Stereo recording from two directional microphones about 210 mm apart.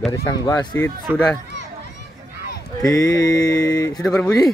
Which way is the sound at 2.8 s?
15° left (ahead or behind).